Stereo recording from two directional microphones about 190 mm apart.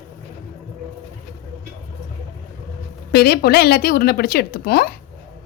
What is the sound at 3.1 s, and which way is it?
Speech, 55° left (ahead or behind).